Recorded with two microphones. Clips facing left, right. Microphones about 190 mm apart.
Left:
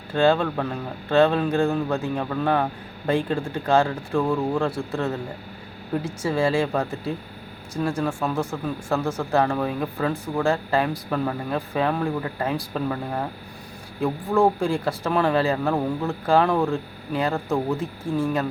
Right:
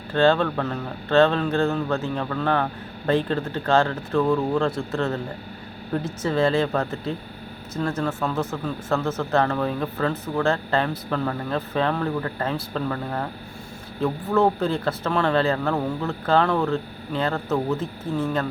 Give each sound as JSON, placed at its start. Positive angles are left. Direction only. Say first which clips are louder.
{"t": 0.1, "sound": "speech", "louder": "right 1 dB", "side_deg": 10}